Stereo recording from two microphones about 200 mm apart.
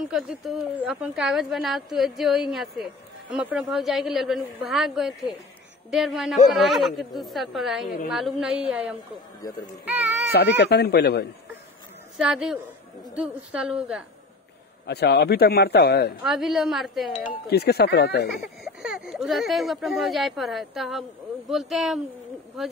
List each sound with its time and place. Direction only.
0.1 s a woman's voice: centre (ahead or behind)
9.8 s baby cry: 10° right (ahead or behind)
10.3 s speech: 55° left (ahead or behind)
12.2 s a woman's voice: 5° right (ahead or behind)
14.9 s speech: 55° left (ahead or behind)
16.2 s a woman's voice: centre (ahead or behind)
17.5 s speech: 55° left (ahead or behind)
18.3 s a woman's voice: centre (ahead or behind)